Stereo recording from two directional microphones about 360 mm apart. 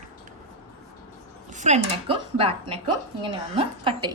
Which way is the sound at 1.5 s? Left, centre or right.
Centre.